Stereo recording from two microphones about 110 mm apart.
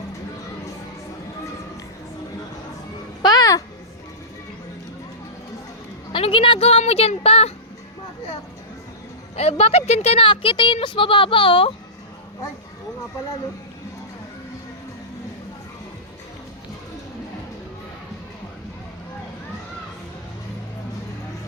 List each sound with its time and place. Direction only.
3.2 s a sound: 35° left (ahead or behind)
6.1 s speech: 50° left (ahead or behind)
9.3 s speech: 65° left (ahead or behind); by 11.7 s 50° left (ahead or behind)